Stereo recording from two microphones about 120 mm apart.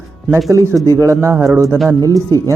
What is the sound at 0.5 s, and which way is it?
Speech, 25° right (ahead or behind).